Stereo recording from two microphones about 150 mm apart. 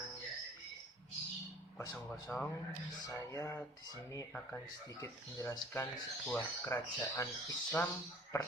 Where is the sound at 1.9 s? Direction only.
5° left (ahead or behind).